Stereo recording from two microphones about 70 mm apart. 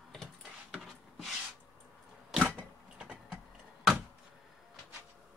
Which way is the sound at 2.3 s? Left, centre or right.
Centre.